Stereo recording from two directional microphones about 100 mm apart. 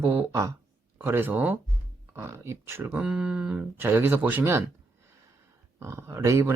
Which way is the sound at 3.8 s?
20° right (ahead or behind).